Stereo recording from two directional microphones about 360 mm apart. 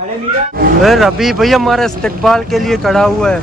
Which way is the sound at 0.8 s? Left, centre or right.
Centre.